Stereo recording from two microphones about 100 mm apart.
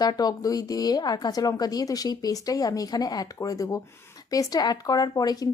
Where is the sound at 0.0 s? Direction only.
45° left (ahead or behind).